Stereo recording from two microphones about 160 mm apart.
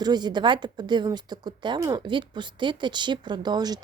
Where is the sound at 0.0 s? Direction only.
25° right (ahead or behind).